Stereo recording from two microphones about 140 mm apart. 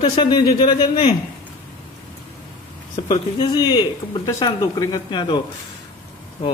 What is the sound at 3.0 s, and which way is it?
Speech, 30° left (ahead or behind).